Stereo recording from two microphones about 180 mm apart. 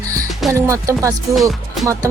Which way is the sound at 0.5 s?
15° right (ahead or behind).